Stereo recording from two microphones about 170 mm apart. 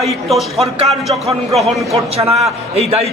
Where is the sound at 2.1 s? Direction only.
35° right (ahead or behind).